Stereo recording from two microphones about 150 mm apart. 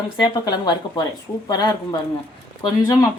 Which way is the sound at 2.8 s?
25° left (ahead or behind).